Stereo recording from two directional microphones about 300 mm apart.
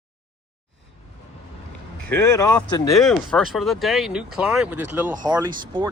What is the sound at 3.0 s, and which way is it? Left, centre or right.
Speech, centre.